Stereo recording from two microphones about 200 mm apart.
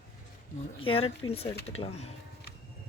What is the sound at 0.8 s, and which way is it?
Speech, 30° left (ahead or behind).